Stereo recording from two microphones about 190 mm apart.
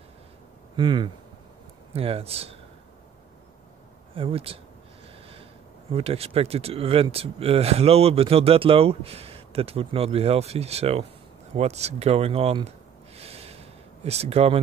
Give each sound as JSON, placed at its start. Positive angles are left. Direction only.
{"t": 0.7, "sound": "speech", "side_deg": -25}
{"t": 4.1, "sound": "speech", "side_deg": -30}
{"t": 11.5, "sound": "a sound", "side_deg": -35}